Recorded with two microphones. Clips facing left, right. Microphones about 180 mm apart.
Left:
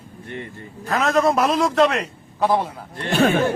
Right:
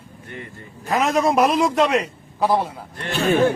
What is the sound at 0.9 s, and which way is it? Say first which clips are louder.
A man's voice: even; 15° right (ahead or behind).